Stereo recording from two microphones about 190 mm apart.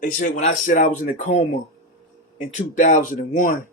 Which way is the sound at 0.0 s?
40° left (ahead or behind).